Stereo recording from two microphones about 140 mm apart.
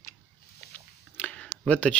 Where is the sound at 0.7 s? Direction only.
10° left (ahead or behind).